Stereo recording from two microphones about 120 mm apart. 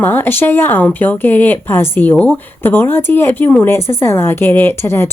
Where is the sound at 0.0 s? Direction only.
15° left (ahead or behind).